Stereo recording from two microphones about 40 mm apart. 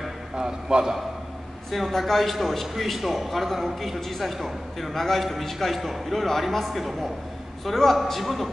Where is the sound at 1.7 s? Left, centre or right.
Centre.